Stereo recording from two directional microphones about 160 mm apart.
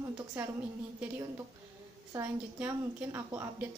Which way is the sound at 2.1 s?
15° right (ahead or behind).